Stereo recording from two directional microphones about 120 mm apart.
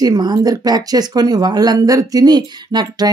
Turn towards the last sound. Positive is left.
turn(degrees=-35)  # may be behind; listen again after turning